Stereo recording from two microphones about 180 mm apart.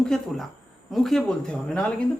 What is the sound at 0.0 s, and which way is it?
Speech, 5° left (ahead or behind).